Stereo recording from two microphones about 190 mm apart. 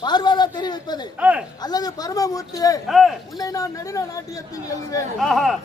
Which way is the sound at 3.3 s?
20° left (ahead or behind).